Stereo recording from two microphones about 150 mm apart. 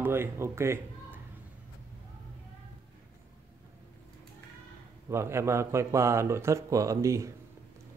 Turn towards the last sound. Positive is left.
turn(degrees=-20)  # may be behind; listen again after turning